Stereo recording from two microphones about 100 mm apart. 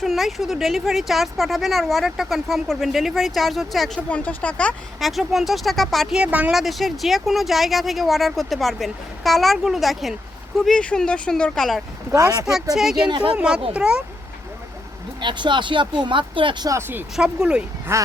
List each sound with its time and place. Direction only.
0.0 s a woman's voice: centre (ahead or behind)
4.1 s speech: 15° left (ahead or behind)
4.9 s a woman's voice: centre (ahead or behind)
6.1 s speech: 15° right (ahead or behind)
6.6 s a woman's voice: centre (ahead or behind)
12.1 s speech: 35° right (ahead or behind)
12.7 s a woman's voice: 5° right (ahead or behind)
13.1 s speech: 55° right (ahead or behind)
13.3 s speech: 10° right (ahead or behind)
15.2 s speech: 50° right (ahead or behind)
17.2 s speech: 10° right (ahead or behind)
17.9 s speech: 25° right (ahead or behind)